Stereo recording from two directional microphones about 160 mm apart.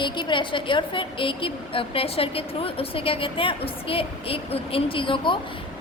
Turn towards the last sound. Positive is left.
turn(degrees=30)  # may be behind; listen again after turning